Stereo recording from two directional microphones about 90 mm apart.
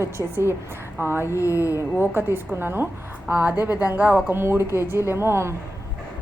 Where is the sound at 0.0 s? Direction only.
30° right (ahead or behind).